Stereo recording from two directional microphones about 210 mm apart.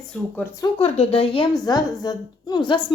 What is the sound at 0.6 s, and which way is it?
A woman's voice, 25° left (ahead or behind).